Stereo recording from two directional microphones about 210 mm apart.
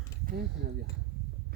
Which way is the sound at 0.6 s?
50° right (ahead or behind).